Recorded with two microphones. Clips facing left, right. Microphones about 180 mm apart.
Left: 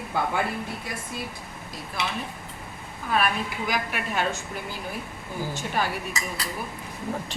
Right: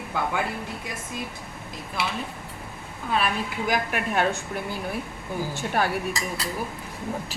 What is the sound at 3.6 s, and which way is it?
Speech, 45° right (ahead or behind).